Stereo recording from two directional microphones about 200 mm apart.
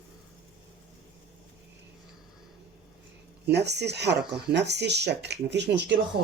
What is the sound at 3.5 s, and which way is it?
Speech, 55° right (ahead or behind).